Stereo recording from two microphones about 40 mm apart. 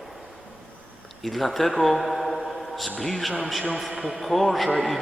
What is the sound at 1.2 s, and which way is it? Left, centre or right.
A man's voice, centre.